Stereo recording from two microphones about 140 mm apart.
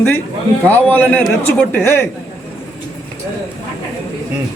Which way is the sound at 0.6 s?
10° left (ahead or behind).